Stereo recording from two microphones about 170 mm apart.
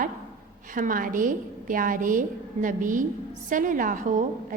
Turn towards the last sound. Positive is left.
turn(degrees=-50)  # may be behind; listen again after turning